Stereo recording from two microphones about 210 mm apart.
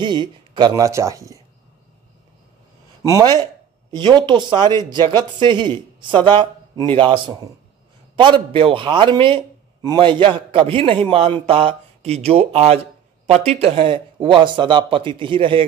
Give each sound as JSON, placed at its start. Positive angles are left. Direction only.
{"t": 0.0, "sound": "speech", "side_deg": -20}
{"t": 3.0, "sound": "a man's voice", "side_deg": -15}